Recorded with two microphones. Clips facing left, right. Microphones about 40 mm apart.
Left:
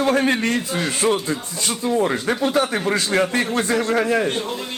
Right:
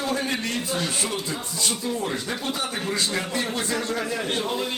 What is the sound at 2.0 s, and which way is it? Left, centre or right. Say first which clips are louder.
Speech: left 9 dB; left.